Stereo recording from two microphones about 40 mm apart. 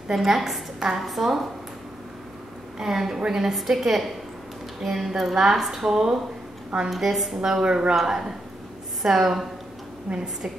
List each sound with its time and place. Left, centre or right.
0.1 s a woman's voice: centre
1.0 s a woman's voice: centre
2.8 s a woman's voice: centre
7.4 s speech: centre
10.0 s a woman's voice: right